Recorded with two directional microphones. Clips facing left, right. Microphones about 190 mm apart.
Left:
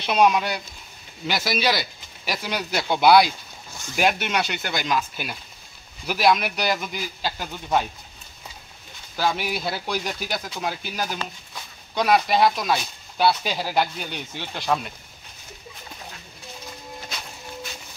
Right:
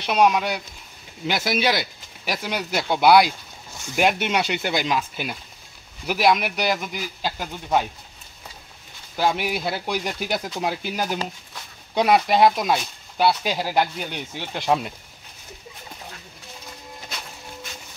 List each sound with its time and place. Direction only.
0.0 s speech: 10° right (ahead or behind); by 4.8 s 25° right (ahead or behind)
6.0 s speech: 15° right (ahead or behind)
9.1 s speech: 20° right (ahead or behind)